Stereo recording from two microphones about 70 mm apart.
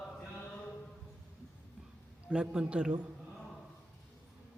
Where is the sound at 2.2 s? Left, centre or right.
Centre.